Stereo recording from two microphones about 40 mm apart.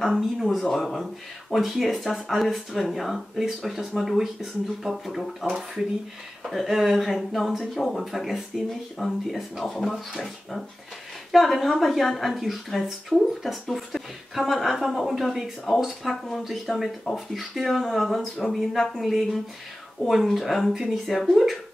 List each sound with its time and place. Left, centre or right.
0.0 s a woman's voice: centre
20.7 s speech: centre
21.0 s a woman's voice: centre